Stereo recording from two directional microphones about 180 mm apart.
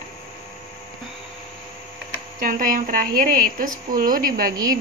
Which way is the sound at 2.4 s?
50° right (ahead or behind).